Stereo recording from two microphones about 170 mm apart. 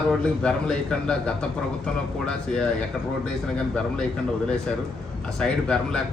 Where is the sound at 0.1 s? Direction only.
5° left (ahead or behind).